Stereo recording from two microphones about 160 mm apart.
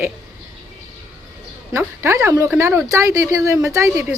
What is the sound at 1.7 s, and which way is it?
Speech, 15° right (ahead or behind).